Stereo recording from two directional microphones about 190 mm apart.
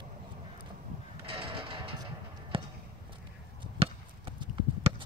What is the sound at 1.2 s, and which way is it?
Music, 30° right (ahead or behind).